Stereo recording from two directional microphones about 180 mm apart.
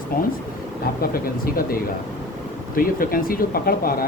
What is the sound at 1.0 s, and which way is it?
Speech, 55° left (ahead or behind).